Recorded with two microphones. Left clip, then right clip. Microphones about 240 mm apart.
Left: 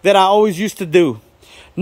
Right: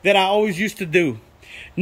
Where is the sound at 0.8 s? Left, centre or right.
Centre.